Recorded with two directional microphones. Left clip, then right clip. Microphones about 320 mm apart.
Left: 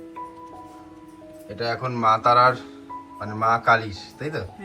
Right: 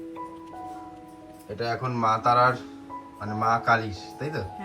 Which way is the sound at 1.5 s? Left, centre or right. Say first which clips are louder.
Left 2 dB; centre.